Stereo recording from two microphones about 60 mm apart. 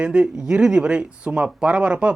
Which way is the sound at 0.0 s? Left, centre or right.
Centre.